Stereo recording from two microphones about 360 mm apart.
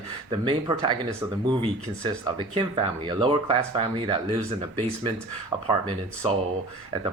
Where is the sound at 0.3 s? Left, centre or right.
Centre.